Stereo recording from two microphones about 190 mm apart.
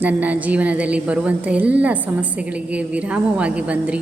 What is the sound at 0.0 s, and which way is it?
A woman's voice, 10° right (ahead or behind).